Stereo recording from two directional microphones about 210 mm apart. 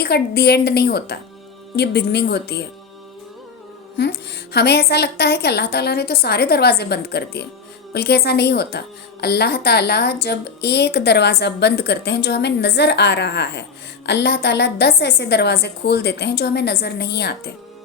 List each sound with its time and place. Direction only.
0.0 s a woman's voice: 50° left (ahead or behind)
3.9 s a woman's voice: 55° left (ahead or behind)